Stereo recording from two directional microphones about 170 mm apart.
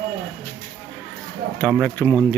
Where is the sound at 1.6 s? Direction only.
Centre (ahead or behind).